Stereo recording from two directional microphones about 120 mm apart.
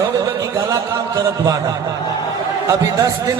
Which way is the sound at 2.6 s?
30° right (ahead or behind).